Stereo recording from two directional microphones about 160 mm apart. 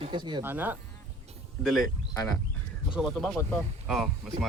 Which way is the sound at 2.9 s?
Centre (ahead or behind).